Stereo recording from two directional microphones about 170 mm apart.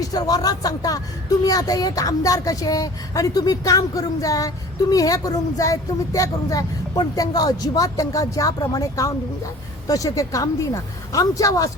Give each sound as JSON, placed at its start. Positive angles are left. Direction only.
{"t": 0.0, "sound": "speech", "side_deg": 20}